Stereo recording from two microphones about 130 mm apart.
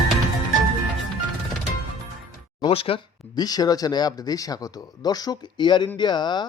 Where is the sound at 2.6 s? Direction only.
40° left (ahead or behind).